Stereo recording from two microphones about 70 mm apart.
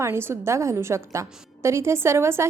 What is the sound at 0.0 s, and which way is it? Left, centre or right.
A woman's voice, right.